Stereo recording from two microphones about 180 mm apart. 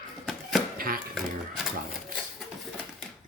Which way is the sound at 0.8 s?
55° right (ahead or behind).